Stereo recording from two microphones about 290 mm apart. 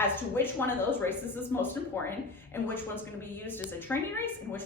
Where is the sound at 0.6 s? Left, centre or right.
Centre.